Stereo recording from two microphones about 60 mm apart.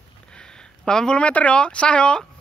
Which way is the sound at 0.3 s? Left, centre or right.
Centre.